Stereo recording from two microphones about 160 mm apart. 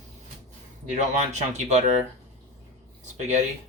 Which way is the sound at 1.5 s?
45° right (ahead or behind).